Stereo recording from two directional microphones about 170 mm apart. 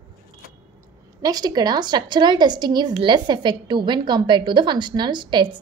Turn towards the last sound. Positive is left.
turn(degrees=-25)  # may be behind; listen again after turning